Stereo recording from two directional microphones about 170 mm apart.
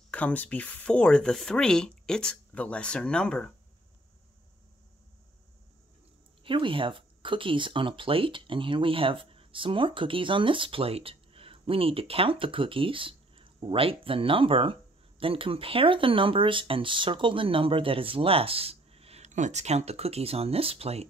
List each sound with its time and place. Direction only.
0.1 s speech: 10° left (ahead or behind)
6.4 s speech: 30° right (ahead or behind)